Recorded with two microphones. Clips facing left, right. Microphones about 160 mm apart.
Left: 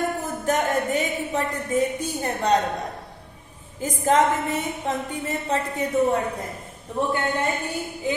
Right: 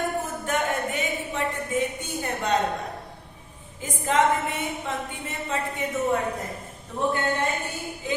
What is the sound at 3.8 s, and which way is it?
A woman's voice, 40° left (ahead or behind).